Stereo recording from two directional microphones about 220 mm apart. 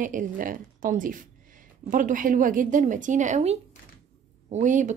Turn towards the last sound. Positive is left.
turn(degrees=-35)  # may be behind; listen again after turning